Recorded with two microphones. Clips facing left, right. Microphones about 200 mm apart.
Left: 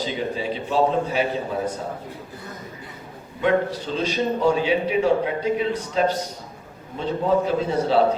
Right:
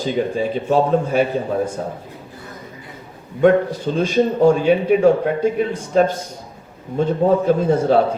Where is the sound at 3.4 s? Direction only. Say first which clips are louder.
Right 7 dB; 50° right (ahead or behind).